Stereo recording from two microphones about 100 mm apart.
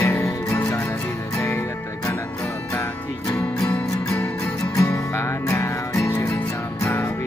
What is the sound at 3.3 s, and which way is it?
Music, 35° left (ahead or behind).